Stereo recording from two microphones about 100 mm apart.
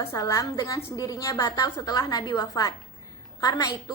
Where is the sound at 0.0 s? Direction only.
25° left (ahead or behind).